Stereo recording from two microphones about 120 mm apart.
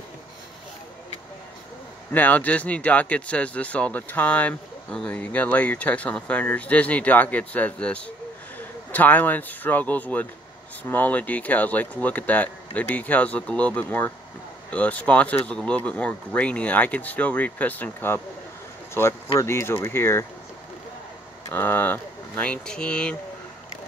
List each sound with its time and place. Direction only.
2.1 s speech: 15° left (ahead or behind)
21.5 s speech: 15° left (ahead or behind)